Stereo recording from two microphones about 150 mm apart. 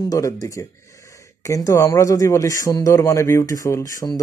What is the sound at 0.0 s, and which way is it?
Speech, 25° left (ahead or behind).